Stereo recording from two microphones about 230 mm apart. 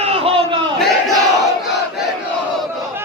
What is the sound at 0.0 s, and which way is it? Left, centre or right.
Crowd, right.